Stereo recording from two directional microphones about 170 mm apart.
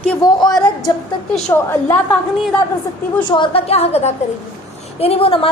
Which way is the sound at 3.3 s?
30° left (ahead or behind).